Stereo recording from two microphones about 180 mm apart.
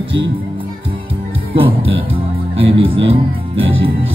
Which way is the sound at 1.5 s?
30° right (ahead or behind).